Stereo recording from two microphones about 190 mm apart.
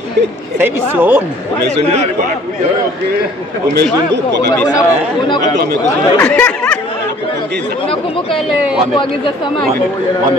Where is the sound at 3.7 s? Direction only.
60° right (ahead or behind).